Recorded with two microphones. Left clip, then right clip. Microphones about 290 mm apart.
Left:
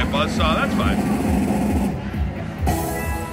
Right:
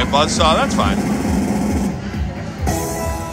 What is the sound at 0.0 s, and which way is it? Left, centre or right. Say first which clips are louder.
Speech: right 6 dB; centre.